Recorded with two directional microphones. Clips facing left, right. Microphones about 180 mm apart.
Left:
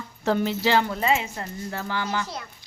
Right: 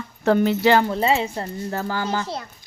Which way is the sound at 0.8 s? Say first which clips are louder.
Right 4 dB; 30° right (ahead or behind).